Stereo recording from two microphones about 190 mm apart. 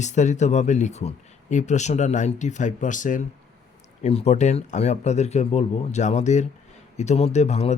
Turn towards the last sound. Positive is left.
turn(degrees=35)  # may be behind; listen again after turning